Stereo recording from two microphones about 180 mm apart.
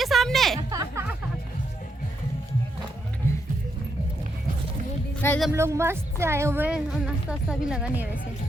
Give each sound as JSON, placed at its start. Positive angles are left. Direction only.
{"t": 0.0, "sound": "a sound", "side_deg": 0}
{"t": 0.7, "sound": "music", "side_deg": -20}
{"t": 5.2, "sound": "speech", "side_deg": 15}
{"t": 5.5, "sound": "a woman's voice", "side_deg": -15}